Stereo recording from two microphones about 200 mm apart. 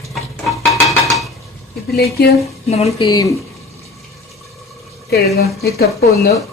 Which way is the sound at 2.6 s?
30° left (ahead or behind).